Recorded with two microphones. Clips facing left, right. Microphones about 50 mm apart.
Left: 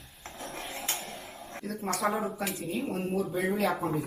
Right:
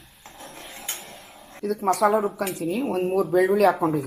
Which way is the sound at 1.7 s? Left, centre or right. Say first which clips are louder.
Right 10 dB; right.